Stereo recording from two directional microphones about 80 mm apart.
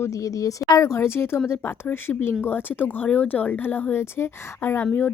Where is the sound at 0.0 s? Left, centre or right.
Left.